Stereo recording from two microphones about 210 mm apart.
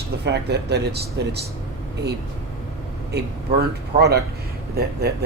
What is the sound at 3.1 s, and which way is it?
Speech, 50° right (ahead or behind).